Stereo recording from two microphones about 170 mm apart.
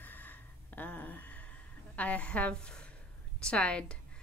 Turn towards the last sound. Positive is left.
turn(degrees=5)  # may be behind; listen again after turning